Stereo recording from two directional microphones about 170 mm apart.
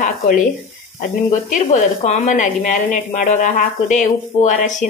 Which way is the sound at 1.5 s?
45° left (ahead or behind).